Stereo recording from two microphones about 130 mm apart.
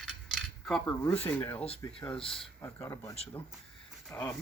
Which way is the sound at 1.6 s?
50° left (ahead or behind).